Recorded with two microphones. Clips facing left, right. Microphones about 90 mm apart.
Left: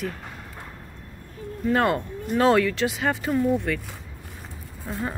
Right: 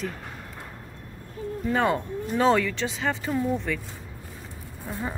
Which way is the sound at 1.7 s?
Centre (ahead or behind).